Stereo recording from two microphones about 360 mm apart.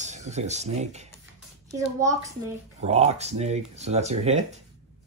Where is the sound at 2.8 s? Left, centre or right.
Centre.